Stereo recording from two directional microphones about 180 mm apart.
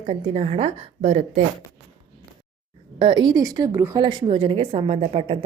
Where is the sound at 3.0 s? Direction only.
25° right (ahead or behind).